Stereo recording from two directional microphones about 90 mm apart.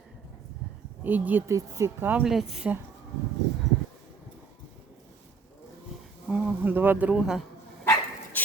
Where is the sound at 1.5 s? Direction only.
35° right (ahead or behind).